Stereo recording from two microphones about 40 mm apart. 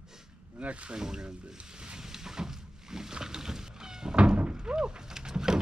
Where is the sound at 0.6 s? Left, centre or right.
Right.